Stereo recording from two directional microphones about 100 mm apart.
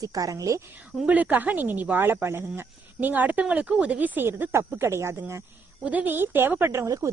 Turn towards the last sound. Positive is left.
turn(degrees=-30)  # may be behind; listen again after turning